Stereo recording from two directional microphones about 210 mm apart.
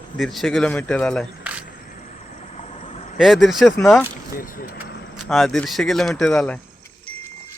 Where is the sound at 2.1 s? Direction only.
30° left (ahead or behind).